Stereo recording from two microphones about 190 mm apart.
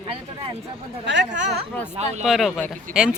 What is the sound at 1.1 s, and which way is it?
Speech, 70° right (ahead or behind).